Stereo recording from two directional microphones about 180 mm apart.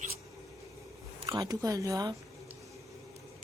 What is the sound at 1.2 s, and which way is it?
Speech, 20° right (ahead or behind).